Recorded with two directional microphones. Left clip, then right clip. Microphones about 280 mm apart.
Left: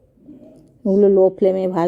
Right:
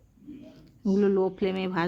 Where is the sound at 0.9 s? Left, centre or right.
Centre.